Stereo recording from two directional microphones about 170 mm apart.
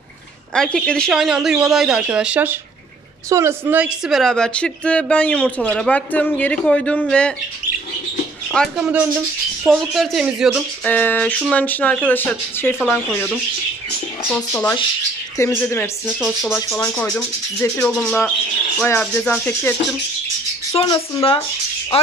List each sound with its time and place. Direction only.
0.6 s speech: 5° left (ahead or behind)
8.5 s speech: centre (ahead or behind)
10.8 s speech: 10° left (ahead or behind)
16.1 s speech: 5° right (ahead or behind)
16.4 s speech: 20° left (ahead or behind)
20.8 s speech: 25° left (ahead or behind)